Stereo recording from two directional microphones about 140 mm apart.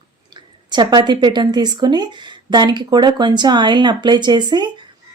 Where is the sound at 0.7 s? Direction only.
30° right (ahead or behind).